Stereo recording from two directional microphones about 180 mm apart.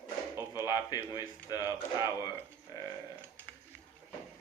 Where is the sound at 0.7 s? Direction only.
20° left (ahead or behind).